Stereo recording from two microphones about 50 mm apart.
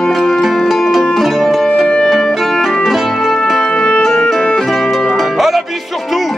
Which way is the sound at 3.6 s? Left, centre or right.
Centre.